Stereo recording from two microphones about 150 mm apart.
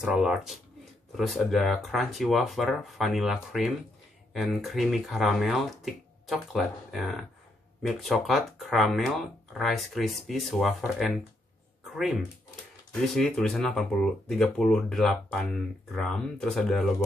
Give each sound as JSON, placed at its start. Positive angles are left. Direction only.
{"t": 0.0, "sound": "speech", "side_deg": -5}